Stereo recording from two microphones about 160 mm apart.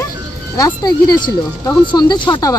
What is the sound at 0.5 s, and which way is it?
Speech, 20° left (ahead or behind).